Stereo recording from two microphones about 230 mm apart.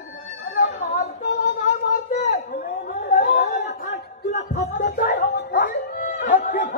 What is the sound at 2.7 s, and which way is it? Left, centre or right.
Chatter, left.